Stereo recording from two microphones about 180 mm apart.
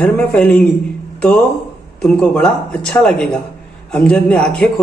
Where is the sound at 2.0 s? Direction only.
5° left (ahead or behind).